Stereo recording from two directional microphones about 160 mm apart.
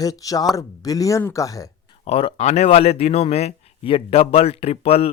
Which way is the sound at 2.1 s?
40° left (ahead or behind).